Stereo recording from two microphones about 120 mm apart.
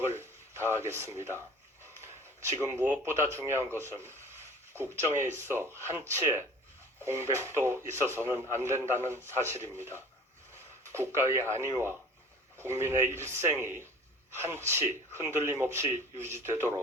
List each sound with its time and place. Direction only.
0.1 s speech: 20° right (ahead or behind)
2.5 s speech: 20° right (ahead or behind)